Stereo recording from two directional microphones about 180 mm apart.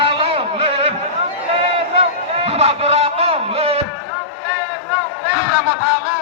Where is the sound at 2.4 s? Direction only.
35° right (ahead or behind).